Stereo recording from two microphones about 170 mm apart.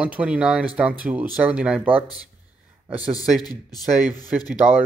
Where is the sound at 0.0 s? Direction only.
5° right (ahead or behind).